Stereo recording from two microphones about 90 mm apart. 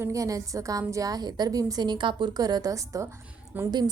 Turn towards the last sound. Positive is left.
turn(degrees=-20)  # may be behind; listen again after turning